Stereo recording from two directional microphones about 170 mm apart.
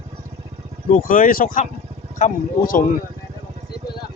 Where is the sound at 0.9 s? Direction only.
55° left (ahead or behind).